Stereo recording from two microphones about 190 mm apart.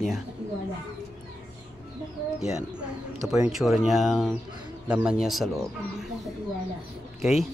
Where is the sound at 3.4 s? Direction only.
Centre (ahead or behind).